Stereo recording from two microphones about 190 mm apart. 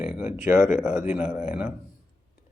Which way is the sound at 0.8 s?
10° right (ahead or behind).